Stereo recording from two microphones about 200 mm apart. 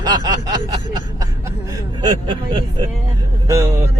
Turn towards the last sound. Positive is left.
turn(degrees=-15)  # may be behind; listen again after turning